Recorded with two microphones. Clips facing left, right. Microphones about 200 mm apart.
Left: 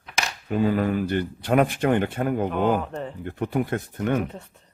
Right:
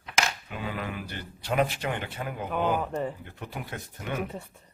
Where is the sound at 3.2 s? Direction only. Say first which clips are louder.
Left 14 dB; 55° left (ahead or behind).